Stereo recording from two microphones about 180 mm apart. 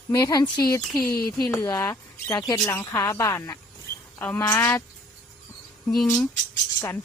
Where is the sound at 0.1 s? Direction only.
20° left (ahead or behind).